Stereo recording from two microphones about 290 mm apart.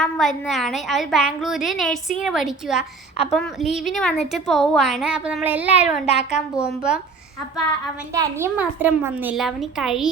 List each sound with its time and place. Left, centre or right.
0.0 s a woman's voice: centre
6.1 s a child's voice: left
6.6 s a woman's voice: centre
8.1 s a woman's voice: centre